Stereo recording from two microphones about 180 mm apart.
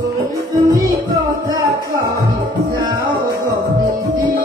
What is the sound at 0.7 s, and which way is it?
Music, 20° right (ahead or behind).